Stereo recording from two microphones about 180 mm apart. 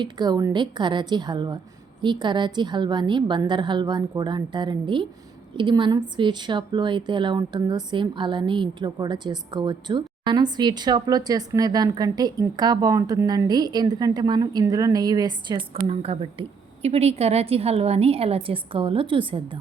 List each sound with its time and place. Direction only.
0.0 s a woman's voice: 25° right (ahead or behind)